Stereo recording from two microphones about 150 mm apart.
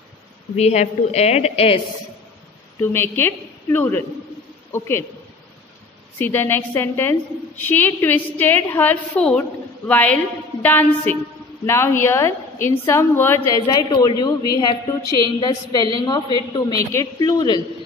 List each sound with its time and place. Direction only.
0.6 s a woman's voice: 45° left (ahead or behind)
2.8 s a woman's voice: 15° left (ahead or behind)
6.1 s a woman's voice: 15° left (ahead or behind)
13.6 s a woman's voice: 30° left (ahead or behind)